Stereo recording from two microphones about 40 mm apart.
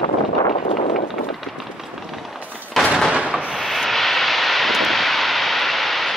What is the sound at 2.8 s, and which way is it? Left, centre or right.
Artillery fire, centre.